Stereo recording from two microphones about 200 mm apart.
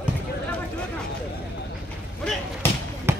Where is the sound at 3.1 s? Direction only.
15° right (ahead or behind).